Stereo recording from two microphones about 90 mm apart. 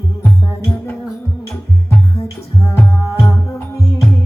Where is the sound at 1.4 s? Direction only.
30° left (ahead or behind).